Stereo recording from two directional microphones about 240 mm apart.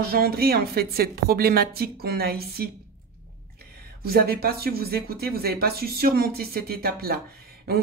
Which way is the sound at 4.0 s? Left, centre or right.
Right.